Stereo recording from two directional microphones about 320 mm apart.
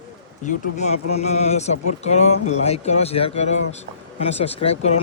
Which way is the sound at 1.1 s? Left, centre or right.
Centre.